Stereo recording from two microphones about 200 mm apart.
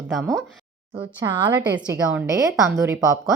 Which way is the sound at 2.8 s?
15° right (ahead or behind).